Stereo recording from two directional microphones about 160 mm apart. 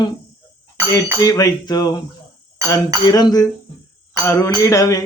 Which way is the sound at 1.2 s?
20° left (ahead or behind).